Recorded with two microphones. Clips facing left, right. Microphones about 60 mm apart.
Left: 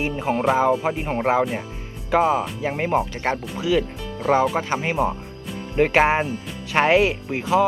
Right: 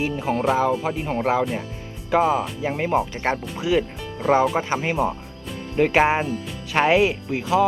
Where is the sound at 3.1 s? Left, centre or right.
Right.